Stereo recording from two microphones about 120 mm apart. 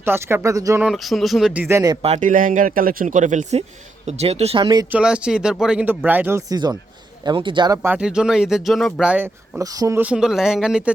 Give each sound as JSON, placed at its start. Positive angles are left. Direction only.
{"t": 0.0, "sound": "speech", "side_deg": -20}
{"t": 0.9, "sound": "speech", "side_deg": 0}
{"t": 1.6, "sound": "speech", "side_deg": -25}
{"t": 2.0, "sound": "speech", "side_deg": -60}
{"t": 4.0, "sound": "speech", "side_deg": -65}
{"t": 4.9, "sound": "speech", "side_deg": -10}
{"t": 6.5, "sound": "speech", "side_deg": -35}
{"t": 7.9, "sound": "speech", "side_deg": -5}
{"t": 9.2, "sound": "speech", "side_deg": -25}
{"t": 10.0, "sound": "speech", "side_deg": -10}